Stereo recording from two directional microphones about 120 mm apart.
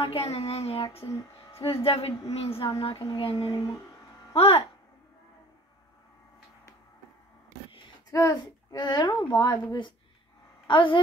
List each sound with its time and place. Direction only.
0.0 s speech: 55° left (ahead or behind)
8.1 s speech: 25° left (ahead or behind)
8.7 s speech: 40° left (ahead or behind)